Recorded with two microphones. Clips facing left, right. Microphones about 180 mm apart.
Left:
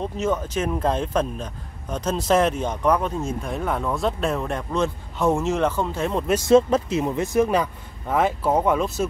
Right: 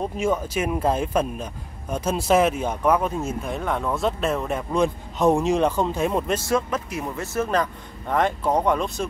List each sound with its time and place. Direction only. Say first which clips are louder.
0.0 s speech: right 1 dB; 10° right (ahead or behind)
6.4 s speech: left 8 dB; 25° left (ahead or behind); by 9.0 s 5° left (ahead or behind)